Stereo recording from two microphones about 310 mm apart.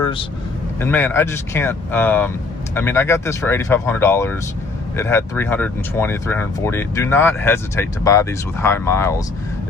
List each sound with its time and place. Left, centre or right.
0.0 s vehicle: centre
0.8 s speech: centre